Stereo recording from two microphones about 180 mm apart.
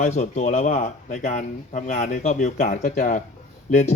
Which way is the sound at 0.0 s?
40° left (ahead or behind).